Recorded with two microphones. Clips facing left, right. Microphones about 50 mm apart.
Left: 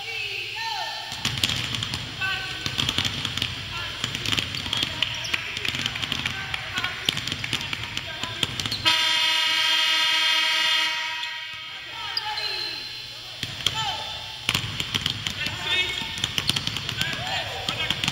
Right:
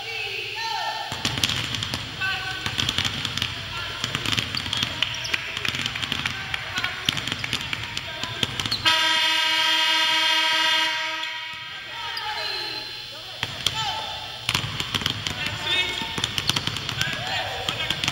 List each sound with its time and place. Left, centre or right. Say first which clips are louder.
1.4 s fireworks: right 1 dB; centre
4.4 s basketball bounce: right 1 dB; centre
8.8 s vehicle: right 2 dB; centre
15.6 s basketball bounce: even; centre
17.1 s basketball bounce: right 1 dB; centre